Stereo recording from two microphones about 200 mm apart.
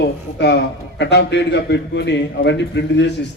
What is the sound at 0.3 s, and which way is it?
A man's voice, 60° left (ahead or behind).